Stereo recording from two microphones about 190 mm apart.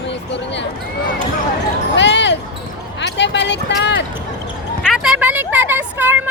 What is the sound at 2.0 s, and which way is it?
Speech, 65° left (ahead or behind).